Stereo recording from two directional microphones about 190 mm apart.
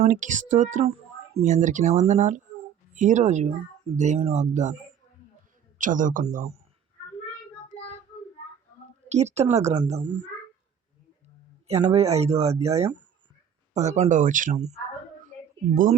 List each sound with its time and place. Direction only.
0.0 s speech: 40° right (ahead or behind)
5.7 s speech: 45° right (ahead or behind)
9.0 s speech: 35° right (ahead or behind)
11.9 s speech: 35° right (ahead or behind)